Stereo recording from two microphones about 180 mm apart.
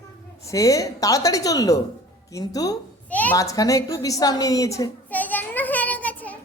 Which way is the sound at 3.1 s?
10° left (ahead or behind).